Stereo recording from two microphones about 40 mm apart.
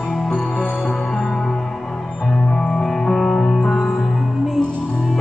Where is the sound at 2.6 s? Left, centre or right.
Centre.